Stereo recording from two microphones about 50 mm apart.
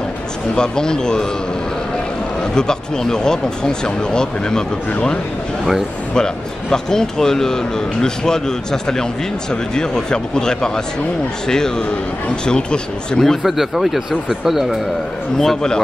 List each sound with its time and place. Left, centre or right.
0.6 s speech: centre
2.5 s speech: centre
6.1 s speech: centre
13.4 s speech: centre
15.3 s speech: centre